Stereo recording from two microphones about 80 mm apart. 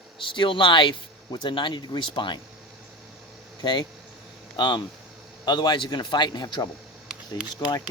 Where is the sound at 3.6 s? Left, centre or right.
Left.